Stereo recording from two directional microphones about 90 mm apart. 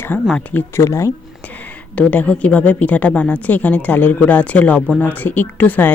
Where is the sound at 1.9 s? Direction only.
15° left (ahead or behind).